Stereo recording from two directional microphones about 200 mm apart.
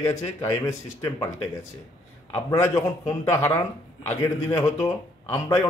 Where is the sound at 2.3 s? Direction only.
15° left (ahead or behind).